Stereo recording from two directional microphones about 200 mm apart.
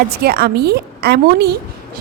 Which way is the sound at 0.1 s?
50° right (ahead or behind).